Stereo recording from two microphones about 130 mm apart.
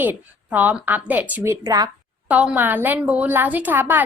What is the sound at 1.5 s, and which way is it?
Speech, 25° right (ahead or behind).